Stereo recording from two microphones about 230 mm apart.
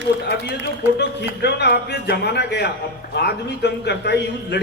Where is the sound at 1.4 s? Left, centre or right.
Left.